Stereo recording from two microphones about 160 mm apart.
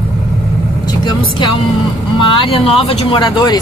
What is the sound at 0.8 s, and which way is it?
Speech, 25° left (ahead or behind).